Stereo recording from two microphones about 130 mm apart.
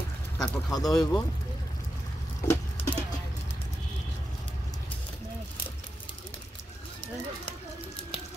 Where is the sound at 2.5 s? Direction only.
20° left (ahead or behind).